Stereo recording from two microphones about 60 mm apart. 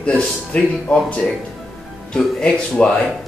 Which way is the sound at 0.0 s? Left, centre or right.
Left.